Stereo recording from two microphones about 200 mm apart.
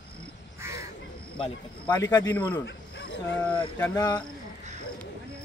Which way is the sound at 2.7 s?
60° left (ahead or behind).